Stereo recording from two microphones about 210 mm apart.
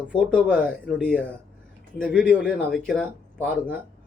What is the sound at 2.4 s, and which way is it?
Speech, 5° left (ahead or behind).